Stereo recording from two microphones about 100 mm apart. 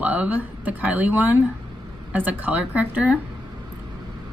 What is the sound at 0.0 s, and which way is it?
A woman's voice, 15° right (ahead or behind).